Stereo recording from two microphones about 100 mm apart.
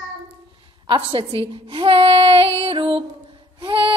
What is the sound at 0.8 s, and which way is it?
A woman's voice, 55° right (ahead or behind).